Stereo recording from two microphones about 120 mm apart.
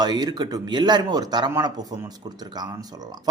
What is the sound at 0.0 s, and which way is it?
Speech, 35° right (ahead or behind).